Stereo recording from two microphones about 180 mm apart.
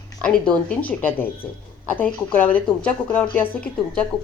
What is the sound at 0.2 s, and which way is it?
A woman's voice, 5° left (ahead or behind).